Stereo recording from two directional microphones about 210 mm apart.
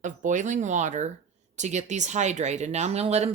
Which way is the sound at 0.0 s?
35° right (ahead or behind).